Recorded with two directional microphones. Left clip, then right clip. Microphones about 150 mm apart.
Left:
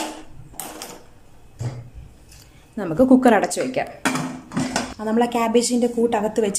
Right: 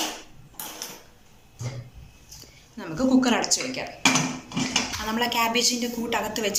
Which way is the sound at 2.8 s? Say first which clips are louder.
Left 7 dB; 85° left.